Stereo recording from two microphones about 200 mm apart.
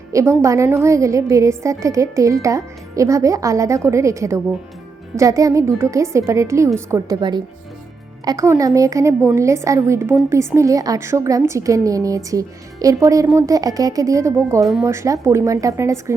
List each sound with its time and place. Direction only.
0.1 s a woman's voice: 15° right (ahead or behind)